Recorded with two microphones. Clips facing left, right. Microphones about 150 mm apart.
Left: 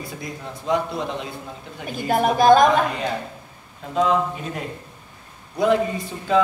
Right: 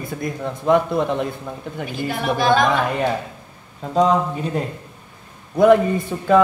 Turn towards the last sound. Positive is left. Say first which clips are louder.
# right 5 dB
turn(degrees=-55)  # may be behind; listen again after turning